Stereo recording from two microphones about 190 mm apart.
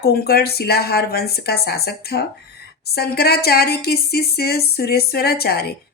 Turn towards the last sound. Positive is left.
turn(degrees=55)  # may be behind; listen again after turning